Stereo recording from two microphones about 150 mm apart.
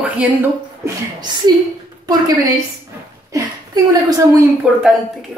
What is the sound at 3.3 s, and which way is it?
Speech, 25° right (ahead or behind).